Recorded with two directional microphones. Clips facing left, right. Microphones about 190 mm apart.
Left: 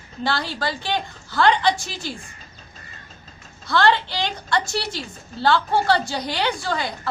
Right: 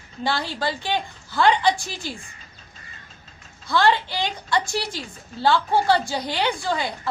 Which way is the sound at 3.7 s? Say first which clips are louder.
Left 1 dB; 15° right (ahead or behind).